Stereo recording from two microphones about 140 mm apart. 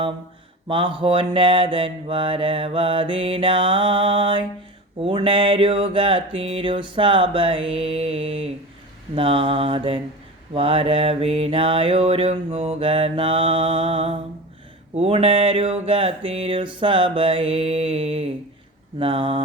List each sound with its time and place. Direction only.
0.7 s mantra: 40° right (ahead or behind)